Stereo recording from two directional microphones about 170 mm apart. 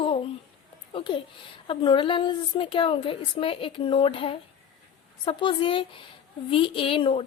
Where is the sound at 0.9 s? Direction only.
30° left (ahead or behind).